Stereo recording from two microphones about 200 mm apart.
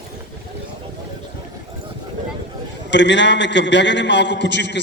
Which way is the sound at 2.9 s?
60° left (ahead or behind).